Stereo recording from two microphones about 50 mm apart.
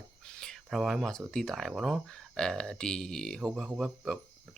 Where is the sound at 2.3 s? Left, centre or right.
Centre.